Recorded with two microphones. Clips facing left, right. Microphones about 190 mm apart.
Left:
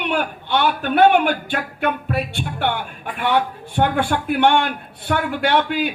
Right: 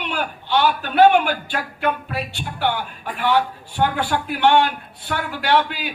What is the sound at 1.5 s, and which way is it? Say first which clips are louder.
Music: left 1 dB; 55° left (ahead or behind).